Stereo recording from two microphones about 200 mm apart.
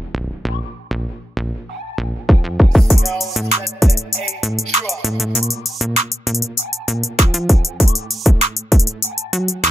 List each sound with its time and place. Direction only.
0.1 s music: centre (ahead or behind)